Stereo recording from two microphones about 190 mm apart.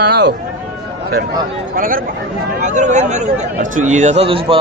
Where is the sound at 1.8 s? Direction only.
45° right (ahead or behind).